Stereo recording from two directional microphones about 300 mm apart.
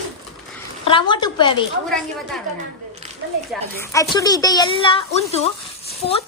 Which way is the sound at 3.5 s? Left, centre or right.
Centre.